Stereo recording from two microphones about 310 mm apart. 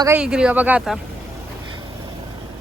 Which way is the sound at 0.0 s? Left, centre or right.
Centre.